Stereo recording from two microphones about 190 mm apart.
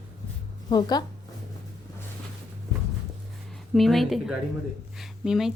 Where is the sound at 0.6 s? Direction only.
20° left (ahead or behind).